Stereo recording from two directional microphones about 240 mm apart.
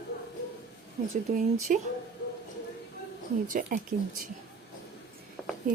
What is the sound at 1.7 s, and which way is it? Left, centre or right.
Speech, right.